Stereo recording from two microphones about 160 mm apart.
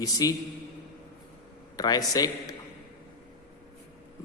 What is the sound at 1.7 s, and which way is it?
Speech, 25° left (ahead or behind).